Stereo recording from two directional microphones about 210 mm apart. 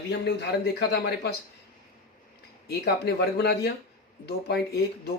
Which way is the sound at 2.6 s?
50° left (ahead or behind).